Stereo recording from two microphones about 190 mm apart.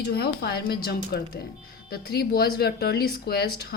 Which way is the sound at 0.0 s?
55° left (ahead or behind).